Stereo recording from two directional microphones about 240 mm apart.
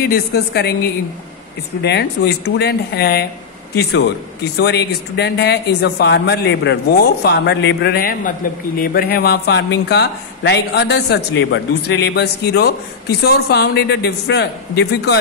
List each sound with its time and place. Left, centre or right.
0.0 s a woman's voice: left
1.8 s speech: left
4.6 s speech: left